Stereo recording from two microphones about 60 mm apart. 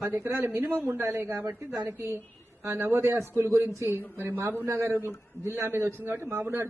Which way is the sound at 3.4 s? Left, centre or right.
Right.